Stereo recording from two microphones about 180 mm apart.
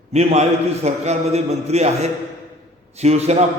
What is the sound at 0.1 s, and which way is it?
A man's voice, 35° right (ahead or behind).